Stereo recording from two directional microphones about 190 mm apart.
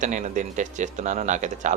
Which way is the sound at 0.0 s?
40° right (ahead or behind).